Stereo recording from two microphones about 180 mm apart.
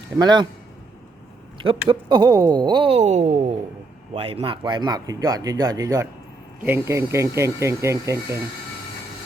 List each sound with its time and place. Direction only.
0.2 s speech: 25° right (ahead or behind)
1.9 s speech: 25° right (ahead or behind)